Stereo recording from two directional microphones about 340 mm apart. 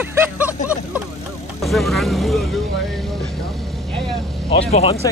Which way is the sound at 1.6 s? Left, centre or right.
Centre.